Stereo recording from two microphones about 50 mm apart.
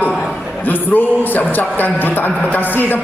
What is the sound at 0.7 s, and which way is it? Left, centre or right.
A man's voice, left.